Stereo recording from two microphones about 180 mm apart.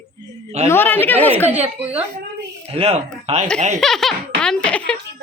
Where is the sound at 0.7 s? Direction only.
10° left (ahead or behind).